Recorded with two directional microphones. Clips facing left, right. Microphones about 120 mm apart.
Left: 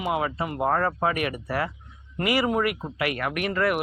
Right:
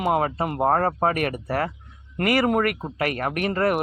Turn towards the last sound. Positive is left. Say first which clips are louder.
# right 2 dB
turn(degrees=-40)  # may be behind; listen again after turning